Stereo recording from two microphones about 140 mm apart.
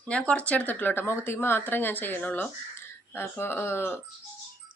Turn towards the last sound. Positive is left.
turn(degrees=15)  # may be behind; listen again after turning